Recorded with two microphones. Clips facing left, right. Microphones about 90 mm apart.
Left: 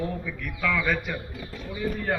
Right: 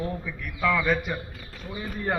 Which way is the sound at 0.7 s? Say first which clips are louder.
Right 2 dB; 15° right (ahead or behind).